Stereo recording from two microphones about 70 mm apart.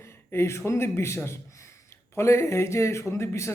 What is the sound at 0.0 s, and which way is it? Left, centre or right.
A man's voice, left.